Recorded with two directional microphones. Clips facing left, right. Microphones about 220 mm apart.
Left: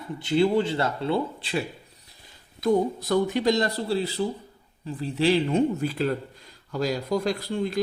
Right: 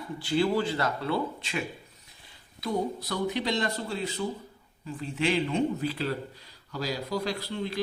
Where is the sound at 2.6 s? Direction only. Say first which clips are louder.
Left 7 dB; 50° left (ahead or behind).